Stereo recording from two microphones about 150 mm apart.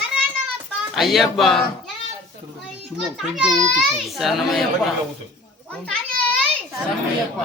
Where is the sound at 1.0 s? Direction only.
Centre (ahead or behind).